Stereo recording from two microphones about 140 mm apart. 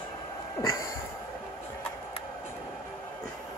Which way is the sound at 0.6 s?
20° left (ahead or behind).